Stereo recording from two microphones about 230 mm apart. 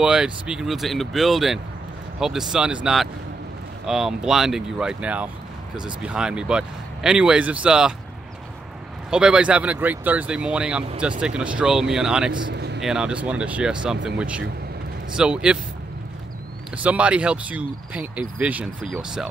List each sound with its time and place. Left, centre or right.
0.0 s speech: centre
9.1 s speech: centre
12.5 s vehicle: right
12.8 s speech: centre
16.7 s speech: centre